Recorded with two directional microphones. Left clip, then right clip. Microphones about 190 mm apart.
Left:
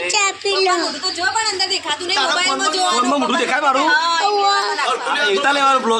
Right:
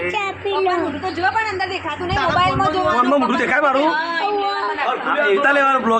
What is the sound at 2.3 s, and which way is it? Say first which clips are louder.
Speech: right 4 dB; 30° right (ahead or behind).